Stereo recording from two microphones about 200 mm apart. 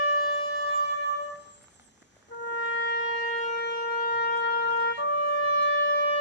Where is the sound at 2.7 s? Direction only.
55° left (ahead or behind).